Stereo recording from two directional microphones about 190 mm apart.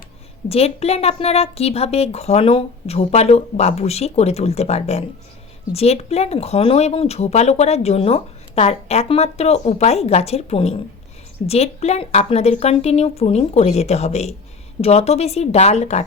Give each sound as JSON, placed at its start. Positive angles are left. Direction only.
{"t": 0.4, "sound": "speech", "side_deg": 30}